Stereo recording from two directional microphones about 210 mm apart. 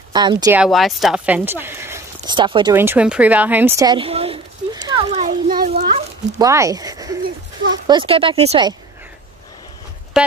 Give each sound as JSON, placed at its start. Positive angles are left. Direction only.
{"t": 0.1, "sound": "speech", "side_deg": -20}
{"t": 0.6, "sound": "speech", "side_deg": 0}
{"t": 2.7, "sound": "speech", "side_deg": -10}
{"t": 4.8, "sound": "a sound", "side_deg": -25}
{"t": 5.5, "sound": "a sound", "side_deg": -40}
{"t": 6.3, "sound": "speech", "side_deg": -15}
{"t": 10.1, "sound": "speech", "side_deg": 0}